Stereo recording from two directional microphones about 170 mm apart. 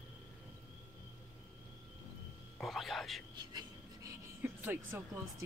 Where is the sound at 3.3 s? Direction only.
20° right (ahead or behind).